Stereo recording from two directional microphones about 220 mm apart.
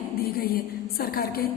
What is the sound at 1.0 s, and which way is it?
Speech, 45° left (ahead or behind).